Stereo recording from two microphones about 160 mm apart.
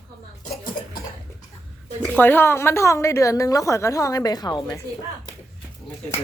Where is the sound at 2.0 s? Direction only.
10° left (ahead or behind).